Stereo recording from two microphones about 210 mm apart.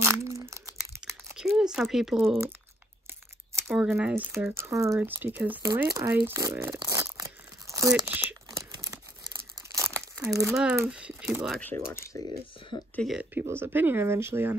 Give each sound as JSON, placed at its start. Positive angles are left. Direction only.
{"t": 0.0, "sound": "a sound", "side_deg": -15}
{"t": 0.7, "sound": "crumpling", "side_deg": 0}
{"t": 3.7, "sound": "speech", "side_deg": -5}
{"t": 7.9, "sound": "crumpling", "side_deg": -5}
{"t": 10.4, "sound": "speech", "side_deg": -5}
{"t": 11.6, "sound": "speech", "side_deg": 10}
{"t": 12.1, "sound": "speech", "side_deg": 20}
{"t": 12.9, "sound": "speech", "side_deg": 0}